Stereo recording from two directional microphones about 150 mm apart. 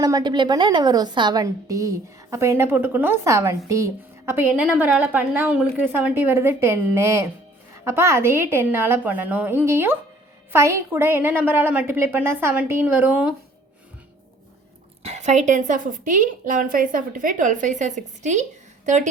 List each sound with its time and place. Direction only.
0.0 s a woman's voice: 30° right (ahead or behind); by 13.3 s 10° right (ahead or behind)
15.0 s a woman's voice: 50° right (ahead or behind)